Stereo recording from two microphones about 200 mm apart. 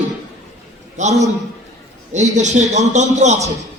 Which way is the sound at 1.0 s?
35° right (ahead or behind).